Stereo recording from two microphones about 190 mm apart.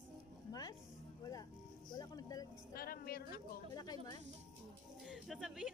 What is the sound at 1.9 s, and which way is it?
Boat, 20° left (ahead or behind).